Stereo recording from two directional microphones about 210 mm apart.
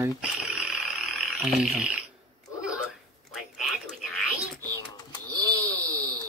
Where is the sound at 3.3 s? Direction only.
Centre (ahead or behind).